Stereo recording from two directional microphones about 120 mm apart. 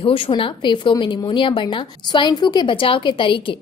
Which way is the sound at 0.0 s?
50° left (ahead or behind).